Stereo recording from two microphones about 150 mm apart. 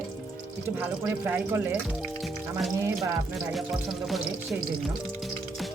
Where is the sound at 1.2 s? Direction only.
15° right (ahead or behind).